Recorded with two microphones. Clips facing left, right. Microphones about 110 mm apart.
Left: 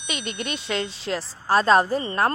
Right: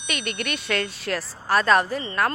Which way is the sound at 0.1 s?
25° left (ahead or behind).